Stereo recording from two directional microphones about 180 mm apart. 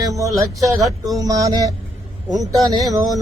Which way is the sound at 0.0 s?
20° right (ahead or behind).